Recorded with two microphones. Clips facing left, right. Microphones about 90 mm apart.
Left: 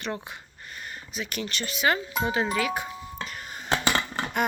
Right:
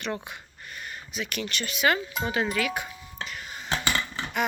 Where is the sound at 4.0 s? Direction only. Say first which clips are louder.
Left 2 dB; 50° left (ahead or behind).